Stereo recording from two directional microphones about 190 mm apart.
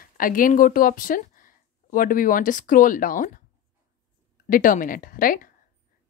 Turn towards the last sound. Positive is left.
turn(degrees=45)  # may be behind; listen again after turning